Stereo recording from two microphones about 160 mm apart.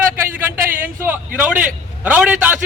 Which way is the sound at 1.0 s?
10° right (ahead or behind).